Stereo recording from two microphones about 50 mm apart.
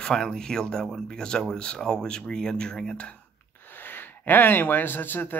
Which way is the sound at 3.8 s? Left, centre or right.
Left.